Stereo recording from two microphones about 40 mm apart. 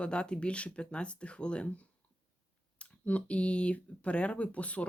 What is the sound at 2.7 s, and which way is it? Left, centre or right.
Speech, left.